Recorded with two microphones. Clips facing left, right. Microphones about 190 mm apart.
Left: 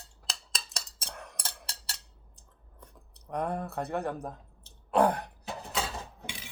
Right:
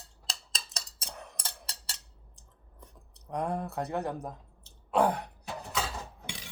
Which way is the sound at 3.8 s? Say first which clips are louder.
Left 2 dB; 15° right (ahead or behind).